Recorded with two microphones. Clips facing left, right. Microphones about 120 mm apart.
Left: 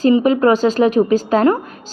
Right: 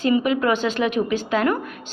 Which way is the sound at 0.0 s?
35° left (ahead or behind).